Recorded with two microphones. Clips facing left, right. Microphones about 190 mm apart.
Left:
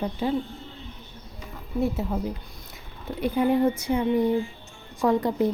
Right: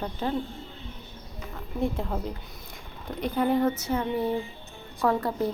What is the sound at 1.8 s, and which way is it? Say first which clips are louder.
A woman's voice: left 2 dB; 5° left (ahead or behind).